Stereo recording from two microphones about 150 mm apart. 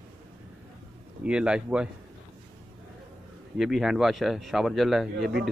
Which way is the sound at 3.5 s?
Centre (ahead or behind).